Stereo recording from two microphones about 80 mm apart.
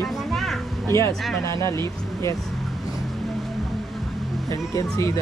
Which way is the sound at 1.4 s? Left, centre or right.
Left.